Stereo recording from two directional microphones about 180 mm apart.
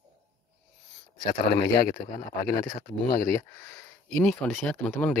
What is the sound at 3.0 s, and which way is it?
Speech, 20° left (ahead or behind).